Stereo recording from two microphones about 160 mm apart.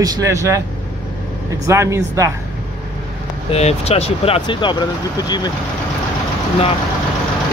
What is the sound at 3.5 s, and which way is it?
Speech, 40° left (ahead or behind).